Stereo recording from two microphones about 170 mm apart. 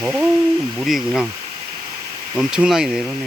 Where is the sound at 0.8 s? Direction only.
Centre (ahead or behind).